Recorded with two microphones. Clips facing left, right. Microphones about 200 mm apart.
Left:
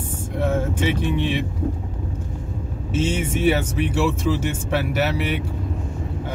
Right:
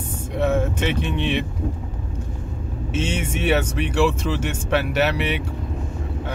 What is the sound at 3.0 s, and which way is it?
Speech, 75° right (ahead or behind).